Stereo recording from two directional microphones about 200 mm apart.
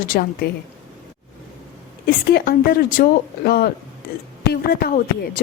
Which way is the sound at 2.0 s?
50° left (ahead or behind).